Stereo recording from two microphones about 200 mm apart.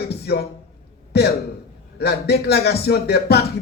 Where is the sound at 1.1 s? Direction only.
50° left (ahead or behind).